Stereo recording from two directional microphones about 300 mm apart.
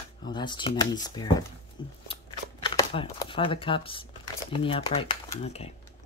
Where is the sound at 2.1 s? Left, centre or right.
Centre.